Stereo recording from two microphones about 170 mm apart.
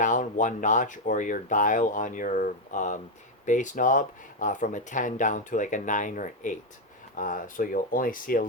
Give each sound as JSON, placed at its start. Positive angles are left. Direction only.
{"t": 0.0, "sound": "speech", "side_deg": 50}